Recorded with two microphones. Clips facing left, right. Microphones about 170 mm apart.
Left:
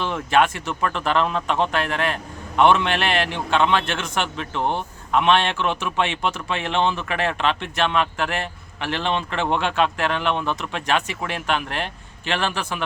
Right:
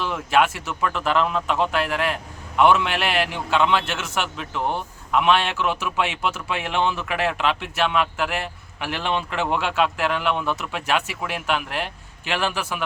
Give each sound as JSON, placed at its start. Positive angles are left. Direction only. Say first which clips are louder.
{"t": 0.0, "sound": "speech", "louder": "left 1 dB", "side_deg": -5}